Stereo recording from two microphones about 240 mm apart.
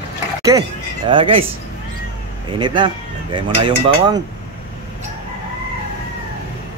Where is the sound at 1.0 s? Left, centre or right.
Right.